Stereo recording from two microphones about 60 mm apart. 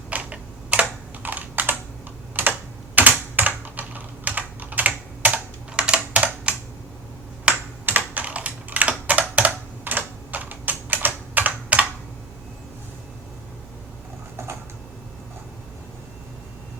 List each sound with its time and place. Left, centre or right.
0.1 s computer keyboard: right
2.9 s typing: right
7.5 s computer keyboard: centre
7.9 s computer keyboard: right